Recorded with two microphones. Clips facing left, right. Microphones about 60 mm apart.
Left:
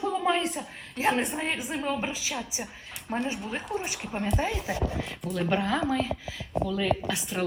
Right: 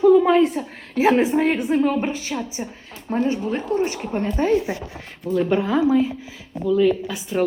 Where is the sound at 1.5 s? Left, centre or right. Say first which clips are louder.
Right 11 dB; centre.